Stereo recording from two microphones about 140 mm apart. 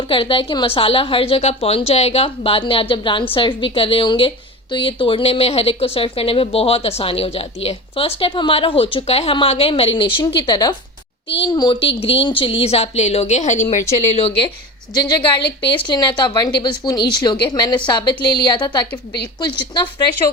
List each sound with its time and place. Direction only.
0.1 s a woman's voice: 40° left (ahead or behind)
11.8 s a woman's voice: 40° left (ahead or behind); by 13.8 s 60° left (ahead or behind)
14.1 s a woman's voice: 45° left (ahead or behind)
14.9 s speech: 30° left (ahead or behind)